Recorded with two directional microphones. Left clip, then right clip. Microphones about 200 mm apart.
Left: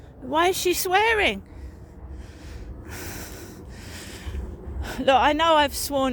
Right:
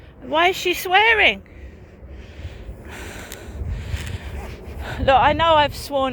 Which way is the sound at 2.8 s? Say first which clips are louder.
Right 2 dB; 50° left (ahead or behind).